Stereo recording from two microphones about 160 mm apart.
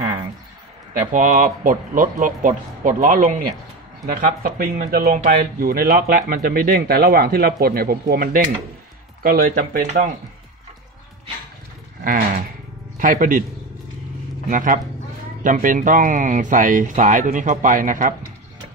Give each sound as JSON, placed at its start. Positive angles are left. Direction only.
{"t": 0.0, "sound": "a sound", "side_deg": -20}
{"t": 1.1, "sound": "speech", "side_deg": -55}
{"t": 4.4, "sound": "speech", "side_deg": -65}
{"t": 12.0, "sound": "a sound", "side_deg": -60}
{"t": 12.9, "sound": "speech", "side_deg": -60}
{"t": 14.5, "sound": "speech", "side_deg": -55}